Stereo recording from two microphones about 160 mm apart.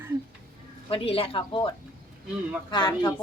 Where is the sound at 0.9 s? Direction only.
35° left (ahead or behind).